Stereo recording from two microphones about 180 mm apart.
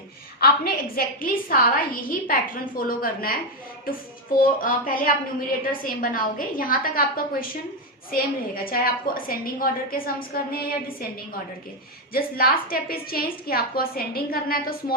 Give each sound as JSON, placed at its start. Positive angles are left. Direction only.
{"t": 0.3, "sound": "a woman's voice", "side_deg": 60}
{"t": 12.1, "sound": "a woman's voice", "side_deg": 55}